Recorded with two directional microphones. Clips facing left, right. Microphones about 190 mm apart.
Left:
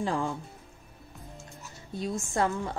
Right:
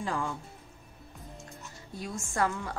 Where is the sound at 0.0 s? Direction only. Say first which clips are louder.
Left 4 dB; 25° left (ahead or behind).